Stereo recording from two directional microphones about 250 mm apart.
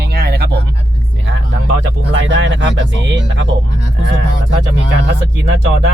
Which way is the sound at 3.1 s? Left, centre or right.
Right.